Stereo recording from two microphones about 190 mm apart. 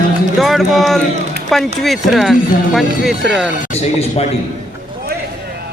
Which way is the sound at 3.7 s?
35° left (ahead or behind).